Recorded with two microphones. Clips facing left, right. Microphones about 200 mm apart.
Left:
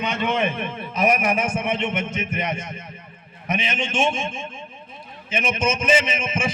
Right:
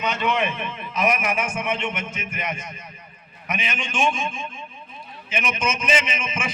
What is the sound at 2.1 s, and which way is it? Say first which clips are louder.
A man's voice: left 4 dB; 30° left (ahead or behind).